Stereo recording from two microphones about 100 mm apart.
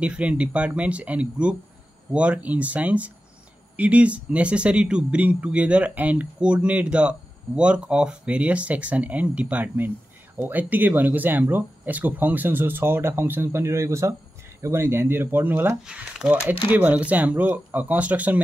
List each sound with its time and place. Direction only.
0.0 s a man's voice: 10° right (ahead or behind)
15.9 s a man's voice: 5° right (ahead or behind)